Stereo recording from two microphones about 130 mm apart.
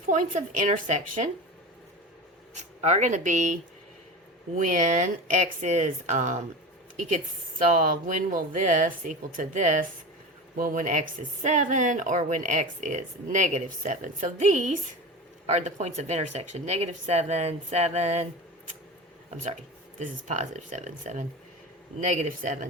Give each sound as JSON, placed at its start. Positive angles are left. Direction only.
{"t": 0.0, "sound": "a woman's voice", "side_deg": -75}
{"t": 2.6, "sound": "a woman's voice", "side_deg": -60}
{"t": 7.7, "sound": "a woman's voice", "side_deg": -80}
{"t": 10.6, "sound": "a woman's voice", "side_deg": -90}
{"t": 15.4, "sound": "speech", "side_deg": -60}
{"t": 20.0, "sound": "a woman's voice", "side_deg": -65}